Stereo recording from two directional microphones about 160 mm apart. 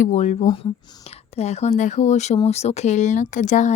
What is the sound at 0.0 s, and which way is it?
Speech, 50° left (ahead or behind).